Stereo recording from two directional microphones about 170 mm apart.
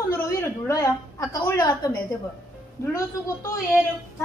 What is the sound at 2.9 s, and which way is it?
Speech, 20° left (ahead or behind).